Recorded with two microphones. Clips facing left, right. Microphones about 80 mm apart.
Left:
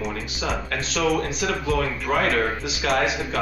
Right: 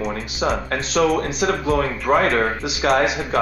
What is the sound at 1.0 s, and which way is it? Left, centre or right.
Speech, right.